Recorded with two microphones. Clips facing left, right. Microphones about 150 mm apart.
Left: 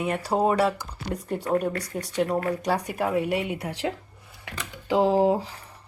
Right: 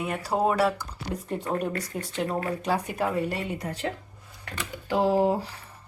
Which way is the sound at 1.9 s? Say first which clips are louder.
Left 5 dB; centre (ahead or behind).